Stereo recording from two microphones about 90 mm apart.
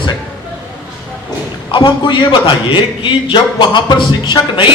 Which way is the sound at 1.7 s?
60° left (ahead or behind).